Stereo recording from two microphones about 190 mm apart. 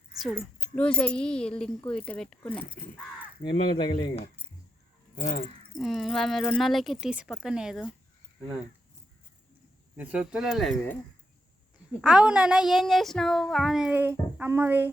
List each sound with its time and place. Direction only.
0.3 s speech: 5° left (ahead or behind)
3.5 s speech: 25° left (ahead or behind)
5.7 s speech: centre (ahead or behind)
10.0 s speech: 5° right (ahead or behind)
12.0 s speech: 5° right (ahead or behind)